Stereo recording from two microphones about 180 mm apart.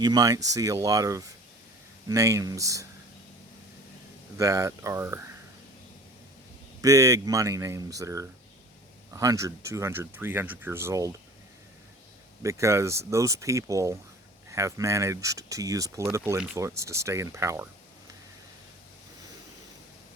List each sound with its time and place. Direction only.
0.0 s speech: 20° right (ahead or behind)
4.4 s speech: 20° right (ahead or behind)
6.8 s speech: 20° right (ahead or behind)
12.4 s speech: 15° right (ahead or behind)